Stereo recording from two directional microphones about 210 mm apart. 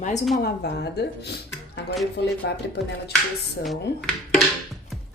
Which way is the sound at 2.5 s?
55° left (ahead or behind).